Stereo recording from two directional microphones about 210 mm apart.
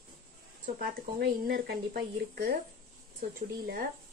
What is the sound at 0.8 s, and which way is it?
Speech, 45° right (ahead or behind).